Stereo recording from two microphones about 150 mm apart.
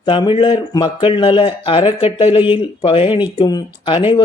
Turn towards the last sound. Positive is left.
turn(degrees=30)  # may be behind; listen again after turning